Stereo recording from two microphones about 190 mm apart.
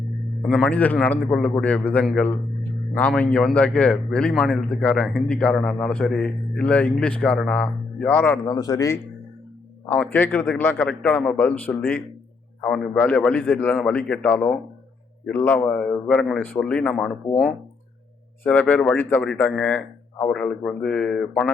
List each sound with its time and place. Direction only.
0.4 s a man's voice: 5° left (ahead or behind)